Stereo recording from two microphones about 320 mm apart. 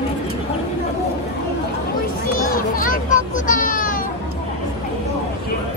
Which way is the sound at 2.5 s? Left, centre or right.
Left.